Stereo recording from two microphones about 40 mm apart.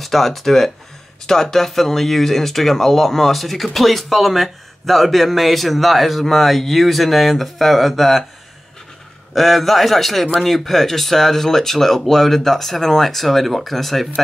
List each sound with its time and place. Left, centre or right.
0.0 s speech: centre
9.3 s speech: centre